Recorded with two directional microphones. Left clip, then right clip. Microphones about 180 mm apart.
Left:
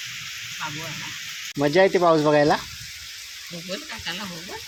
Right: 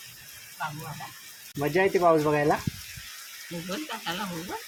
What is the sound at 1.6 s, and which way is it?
Speech, 40° left (ahead or behind).